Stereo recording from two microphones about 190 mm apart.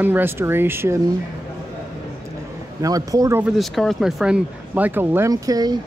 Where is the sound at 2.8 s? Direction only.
20° right (ahead or behind).